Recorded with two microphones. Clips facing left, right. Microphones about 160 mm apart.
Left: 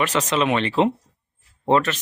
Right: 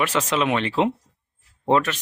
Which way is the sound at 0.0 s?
10° right (ahead or behind).